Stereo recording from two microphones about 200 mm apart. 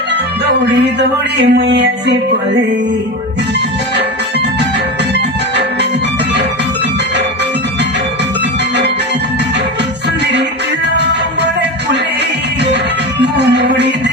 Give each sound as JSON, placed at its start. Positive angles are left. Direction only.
{"t": 0.9, "sound": "music", "side_deg": -60}
{"t": 13.3, "sound": "music", "side_deg": -60}